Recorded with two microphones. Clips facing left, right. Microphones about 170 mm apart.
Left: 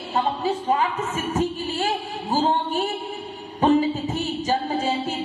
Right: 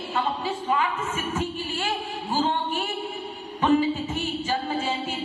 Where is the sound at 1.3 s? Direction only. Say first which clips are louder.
Left 5 dB; 40° left (ahead or behind).